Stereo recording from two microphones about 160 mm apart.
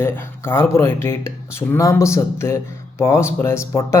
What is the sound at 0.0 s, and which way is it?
A man's voice, 15° left (ahead or behind).